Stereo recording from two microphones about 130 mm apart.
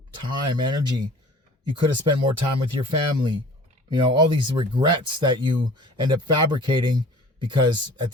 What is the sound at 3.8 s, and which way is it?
Speech, 35° right (ahead or behind).